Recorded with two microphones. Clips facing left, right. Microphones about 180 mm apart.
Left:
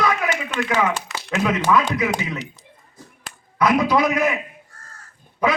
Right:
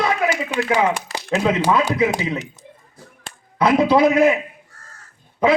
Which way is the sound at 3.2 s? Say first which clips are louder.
Right 2 dB; 30° right (ahead or behind).